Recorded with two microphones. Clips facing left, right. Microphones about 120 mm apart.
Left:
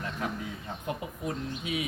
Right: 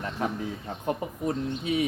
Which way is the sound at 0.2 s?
35° right (ahead or behind).